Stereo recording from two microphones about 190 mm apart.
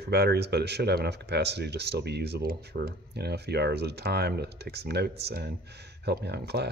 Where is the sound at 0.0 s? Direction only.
60° right (ahead or behind).